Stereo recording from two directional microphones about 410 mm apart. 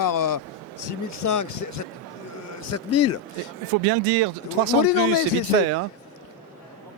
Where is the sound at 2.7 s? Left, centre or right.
Left.